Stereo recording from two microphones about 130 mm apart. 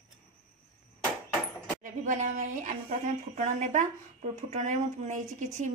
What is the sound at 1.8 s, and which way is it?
A woman's voice, 75° right (ahead or behind).